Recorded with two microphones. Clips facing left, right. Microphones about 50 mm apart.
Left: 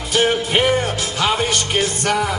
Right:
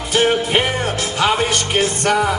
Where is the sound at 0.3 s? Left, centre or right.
Centre.